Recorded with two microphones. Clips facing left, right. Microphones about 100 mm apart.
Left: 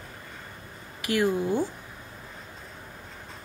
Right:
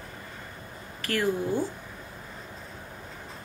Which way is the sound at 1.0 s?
15° left (ahead or behind).